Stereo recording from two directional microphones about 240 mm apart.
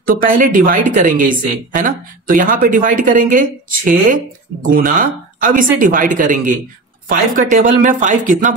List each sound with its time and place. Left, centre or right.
0.0 s speech: right